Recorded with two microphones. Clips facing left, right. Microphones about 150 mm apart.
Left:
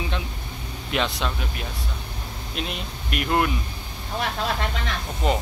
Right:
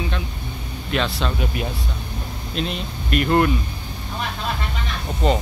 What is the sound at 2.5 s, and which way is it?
Speech, 10° left (ahead or behind).